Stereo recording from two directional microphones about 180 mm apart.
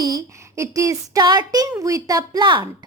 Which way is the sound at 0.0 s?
20° right (ahead or behind).